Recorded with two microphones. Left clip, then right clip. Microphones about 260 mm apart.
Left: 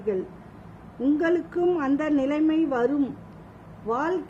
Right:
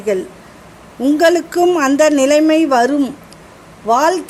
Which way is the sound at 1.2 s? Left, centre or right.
Centre.